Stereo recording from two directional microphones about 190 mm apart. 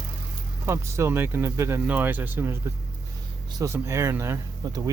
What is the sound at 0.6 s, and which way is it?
Speech, 15° right (ahead or behind).